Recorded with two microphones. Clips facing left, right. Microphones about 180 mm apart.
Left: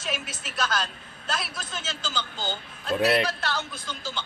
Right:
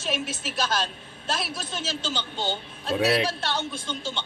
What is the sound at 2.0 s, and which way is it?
A man's voice, 30° right (ahead or behind).